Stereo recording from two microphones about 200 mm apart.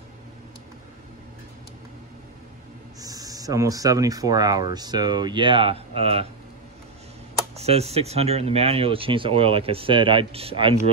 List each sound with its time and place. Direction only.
3.0 s speech: 20° right (ahead or behind)
7.5 s speech: 30° right (ahead or behind)